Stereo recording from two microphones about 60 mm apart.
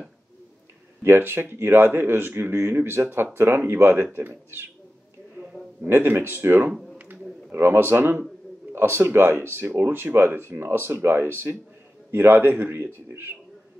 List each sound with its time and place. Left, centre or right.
1.0 s speech: right
5.9 s speech: right
6.7 s a sound: centre
7.5 s speech: right